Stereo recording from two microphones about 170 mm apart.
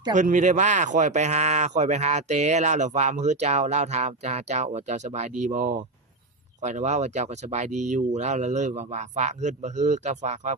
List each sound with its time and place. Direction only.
0.1 s speech: 45° right (ahead or behind)